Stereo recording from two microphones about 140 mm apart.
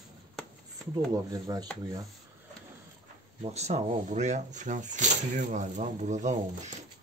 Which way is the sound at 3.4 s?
50° right (ahead or behind).